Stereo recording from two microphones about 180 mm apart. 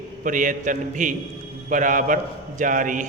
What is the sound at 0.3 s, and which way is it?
A man's voice, 45° right (ahead or behind).